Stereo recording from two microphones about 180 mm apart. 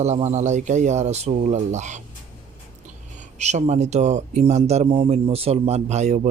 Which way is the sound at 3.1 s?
40° right (ahead or behind).